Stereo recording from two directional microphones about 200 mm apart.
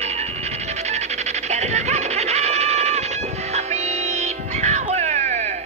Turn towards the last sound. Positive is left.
turn(degrees=-35)  # may be behind; listen again after turning